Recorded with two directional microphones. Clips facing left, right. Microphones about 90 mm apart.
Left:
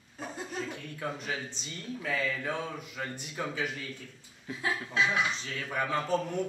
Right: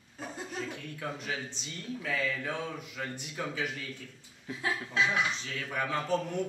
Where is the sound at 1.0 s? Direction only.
40° left (ahead or behind).